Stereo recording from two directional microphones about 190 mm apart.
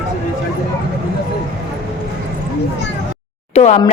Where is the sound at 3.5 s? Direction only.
35° left (ahead or behind).